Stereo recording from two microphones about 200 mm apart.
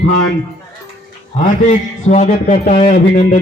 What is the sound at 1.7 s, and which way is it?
Music, 35° left (ahead or behind).